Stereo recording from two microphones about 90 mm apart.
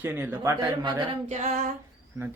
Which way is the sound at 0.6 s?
45° right (ahead or behind).